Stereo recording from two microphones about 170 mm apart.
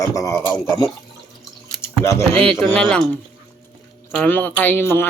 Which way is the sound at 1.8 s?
15° left (ahead or behind).